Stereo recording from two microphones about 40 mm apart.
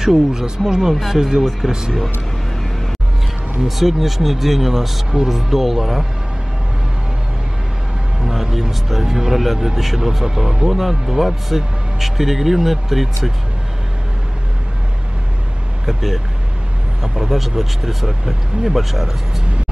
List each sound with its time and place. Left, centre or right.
0.0 s speech: centre
3.6 s a man's voice: centre
8.5 s a man's voice: centre
15.8 s a man's voice: centre